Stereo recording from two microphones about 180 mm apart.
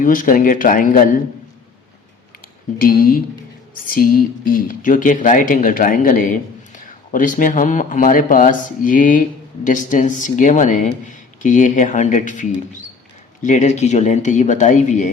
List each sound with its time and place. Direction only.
0.0 s speech: 50° left (ahead or behind)
2.7 s speech: 55° left (ahead or behind)